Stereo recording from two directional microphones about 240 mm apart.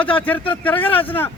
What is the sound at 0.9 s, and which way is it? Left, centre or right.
Speech, left.